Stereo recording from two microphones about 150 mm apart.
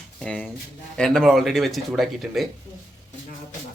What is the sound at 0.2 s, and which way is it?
Speech, 5° left (ahead or behind).